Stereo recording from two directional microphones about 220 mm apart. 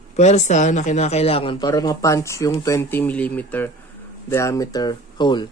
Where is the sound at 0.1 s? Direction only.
30° left (ahead or behind).